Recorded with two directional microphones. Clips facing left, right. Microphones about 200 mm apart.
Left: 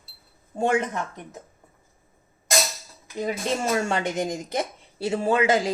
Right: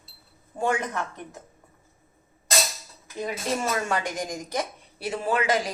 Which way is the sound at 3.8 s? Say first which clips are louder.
Left 3 dB; 25° left (ahead or behind).